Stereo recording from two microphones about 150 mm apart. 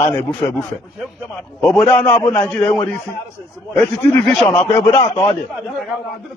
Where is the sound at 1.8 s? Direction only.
15° left (ahead or behind).